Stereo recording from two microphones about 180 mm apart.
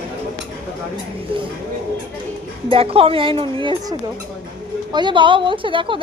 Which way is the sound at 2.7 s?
30° right (ahead or behind).